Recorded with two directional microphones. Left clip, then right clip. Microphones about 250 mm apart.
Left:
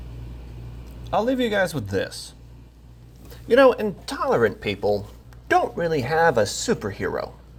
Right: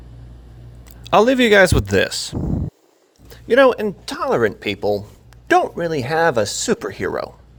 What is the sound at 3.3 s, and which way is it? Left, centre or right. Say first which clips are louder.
Speech: right 3 dB; right.